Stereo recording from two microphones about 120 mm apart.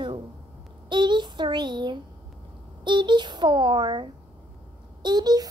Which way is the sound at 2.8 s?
40° right (ahead or behind).